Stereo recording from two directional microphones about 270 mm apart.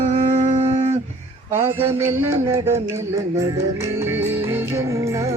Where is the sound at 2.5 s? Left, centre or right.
Centre.